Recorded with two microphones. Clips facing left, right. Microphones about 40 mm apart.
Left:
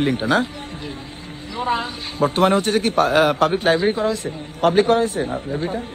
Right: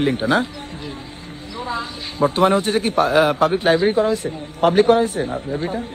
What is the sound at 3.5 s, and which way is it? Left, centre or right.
Speech, centre.